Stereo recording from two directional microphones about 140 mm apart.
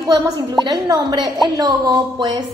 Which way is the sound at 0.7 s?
30° right (ahead or behind).